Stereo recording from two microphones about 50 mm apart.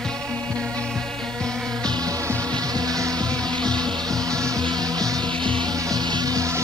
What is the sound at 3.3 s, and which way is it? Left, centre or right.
Music, centre.